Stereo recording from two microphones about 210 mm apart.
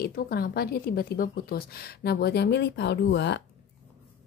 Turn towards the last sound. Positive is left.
turn(degrees=55)  # may be behind; listen again after turning